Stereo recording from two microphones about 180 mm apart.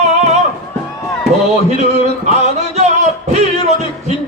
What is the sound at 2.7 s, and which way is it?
Music, 40° right (ahead or behind).